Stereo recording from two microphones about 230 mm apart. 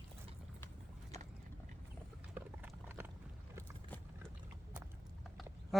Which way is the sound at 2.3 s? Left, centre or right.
Centre.